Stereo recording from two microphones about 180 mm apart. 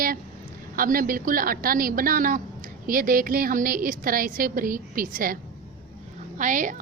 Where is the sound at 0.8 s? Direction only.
50° right (ahead or behind).